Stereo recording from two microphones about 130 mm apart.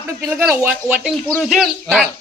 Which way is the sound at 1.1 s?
Centre (ahead or behind).